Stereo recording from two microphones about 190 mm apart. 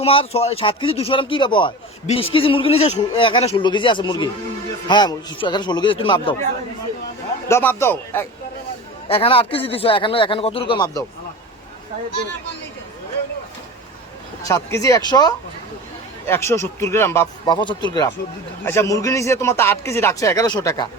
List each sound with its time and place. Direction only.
0.0 s a man's voice: 30° left (ahead or behind)
7.4 s speech: 10° left (ahead or behind)
9.0 s a man's voice: 30° left (ahead or behind)
14.4 s speech: 15° left (ahead or behind)